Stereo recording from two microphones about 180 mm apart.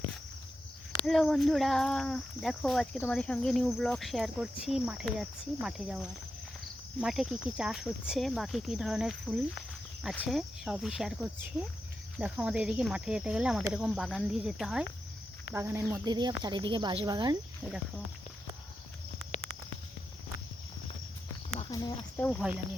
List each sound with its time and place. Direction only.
0.9 s speech: 5° left (ahead or behind)
16.0 s speech: 25° right (ahead or behind)
19.3 s a sound: 40° left (ahead or behind)
21.7 s speech: 20° left (ahead or behind)
22.2 s speech: 10° left (ahead or behind)